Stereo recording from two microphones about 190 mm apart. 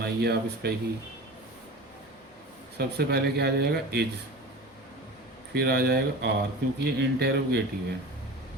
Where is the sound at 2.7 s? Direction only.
60° right (ahead or behind).